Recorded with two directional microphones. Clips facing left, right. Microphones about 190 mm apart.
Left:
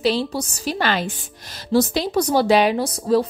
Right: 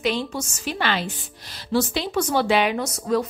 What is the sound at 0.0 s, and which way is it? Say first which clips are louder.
A woman's voice: left 4 dB; 35° left (ahead or behind).